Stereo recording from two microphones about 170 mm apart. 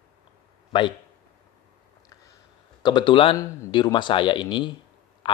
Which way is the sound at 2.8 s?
25° left (ahead or behind).